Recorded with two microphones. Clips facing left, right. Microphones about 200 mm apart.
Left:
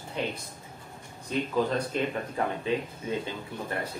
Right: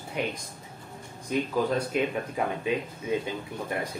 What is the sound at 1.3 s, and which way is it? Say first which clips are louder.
Speech: right 1 dB; 10° right (ahead or behind).